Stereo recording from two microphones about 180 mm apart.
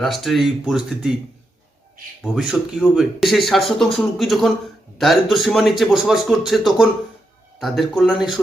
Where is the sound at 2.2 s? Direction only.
Centre (ahead or behind).